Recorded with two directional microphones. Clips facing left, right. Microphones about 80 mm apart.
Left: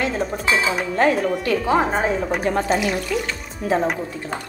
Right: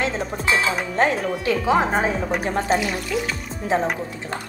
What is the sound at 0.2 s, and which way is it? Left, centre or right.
Dishes, centre.